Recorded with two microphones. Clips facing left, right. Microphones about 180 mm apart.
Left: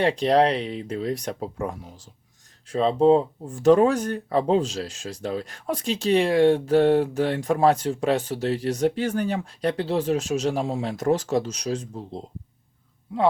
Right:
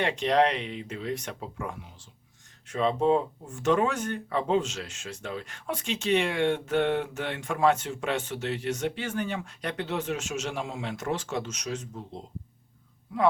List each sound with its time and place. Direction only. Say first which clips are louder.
0.0 s speech: left 5 dB; 35° left (ahead or behind)